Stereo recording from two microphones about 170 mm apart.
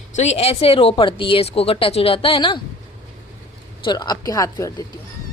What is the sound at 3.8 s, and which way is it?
Speech, 25° left (ahead or behind).